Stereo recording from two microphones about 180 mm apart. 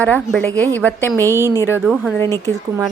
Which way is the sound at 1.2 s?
15° right (ahead or behind).